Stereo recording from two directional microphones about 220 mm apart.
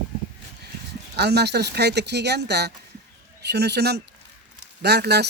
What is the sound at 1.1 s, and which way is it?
Speech, 50° right (ahead or behind).